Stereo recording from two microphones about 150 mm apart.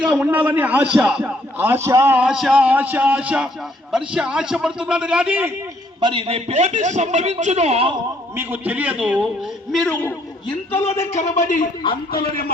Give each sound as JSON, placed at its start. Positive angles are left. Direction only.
{"t": 0.0, "sound": "a man's voice", "side_deg": -10}
{"t": 6.0, "sound": "a man's voice", "side_deg": -35}
{"t": 8.4, "sound": "a man's voice", "side_deg": -10}
{"t": 9.7, "sound": "a man's voice", "side_deg": 10}
{"t": 10.8, "sound": "a man's voice", "side_deg": 45}